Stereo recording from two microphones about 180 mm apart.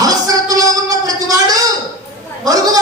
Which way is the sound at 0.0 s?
20° right (ahead or behind).